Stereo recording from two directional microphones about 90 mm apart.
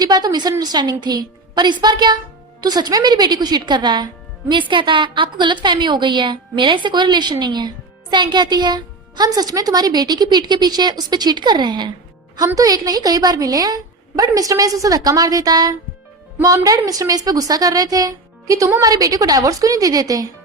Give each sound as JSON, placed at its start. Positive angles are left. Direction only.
{"t": 0.0, "sound": "a woman's voice", "side_deg": -45}
{"t": 12.5, "sound": "a woman's voice", "side_deg": -45}